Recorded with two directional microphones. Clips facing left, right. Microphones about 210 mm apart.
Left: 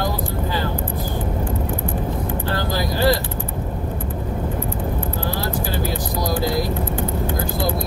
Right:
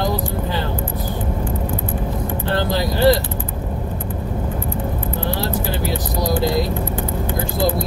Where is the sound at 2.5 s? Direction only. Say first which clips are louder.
Right 4 dB; 25° right (ahead or behind).